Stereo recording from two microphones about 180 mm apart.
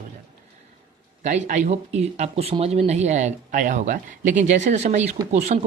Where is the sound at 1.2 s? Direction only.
40° right (ahead or behind).